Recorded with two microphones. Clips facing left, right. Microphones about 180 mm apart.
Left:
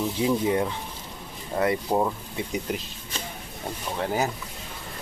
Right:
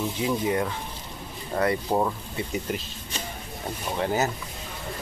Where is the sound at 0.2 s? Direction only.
25° left (ahead or behind).